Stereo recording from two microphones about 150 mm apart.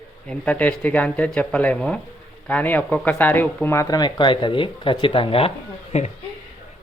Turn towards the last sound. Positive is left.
turn(degrees=45)  # may be behind; listen again after turning